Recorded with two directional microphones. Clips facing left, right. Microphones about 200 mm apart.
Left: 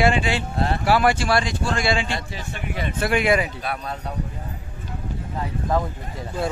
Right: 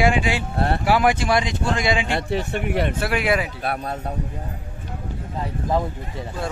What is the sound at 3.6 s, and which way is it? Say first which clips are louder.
Speech: right 3 dB; 55° right (ahead or behind).